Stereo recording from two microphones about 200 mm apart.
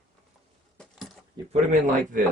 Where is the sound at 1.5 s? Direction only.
40° right (ahead or behind).